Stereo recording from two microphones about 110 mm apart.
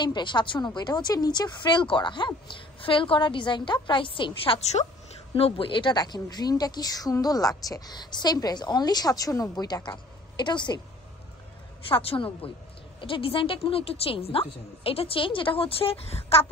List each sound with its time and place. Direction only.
0.0 s a woman's voice: 45° left (ahead or behind)
11.9 s a woman's voice: 55° left (ahead or behind)